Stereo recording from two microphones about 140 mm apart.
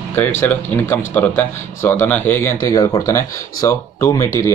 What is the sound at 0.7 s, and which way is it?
Speech, 15° left (ahead or behind).